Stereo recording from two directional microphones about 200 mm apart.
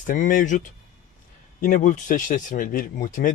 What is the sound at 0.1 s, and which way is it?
Speech, 40° left (ahead or behind).